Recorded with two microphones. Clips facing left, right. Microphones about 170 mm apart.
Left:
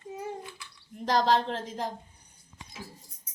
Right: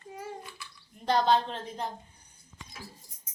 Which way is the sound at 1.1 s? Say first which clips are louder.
Even; 90° left.